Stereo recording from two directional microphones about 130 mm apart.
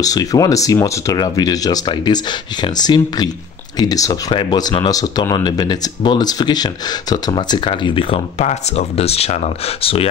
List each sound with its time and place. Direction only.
0.0 s speech: 30° left (ahead or behind); by 10.0 s 45° left (ahead or behind)